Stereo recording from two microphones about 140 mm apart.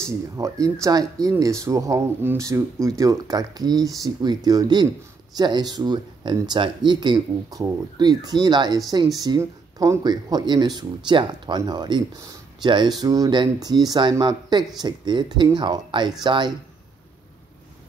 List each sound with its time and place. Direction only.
0.0 s speech: 25° right (ahead or behind)